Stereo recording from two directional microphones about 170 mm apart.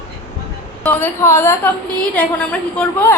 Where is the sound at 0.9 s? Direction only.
10° left (ahead or behind).